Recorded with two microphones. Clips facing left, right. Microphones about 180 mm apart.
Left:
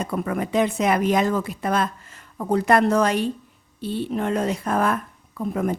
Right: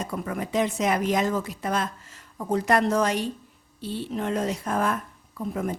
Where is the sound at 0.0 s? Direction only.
65° left (ahead or behind).